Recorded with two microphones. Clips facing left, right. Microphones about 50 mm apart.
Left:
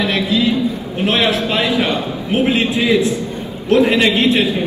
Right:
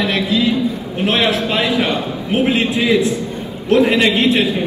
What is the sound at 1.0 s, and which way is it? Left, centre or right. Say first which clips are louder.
A man's voice: even; right.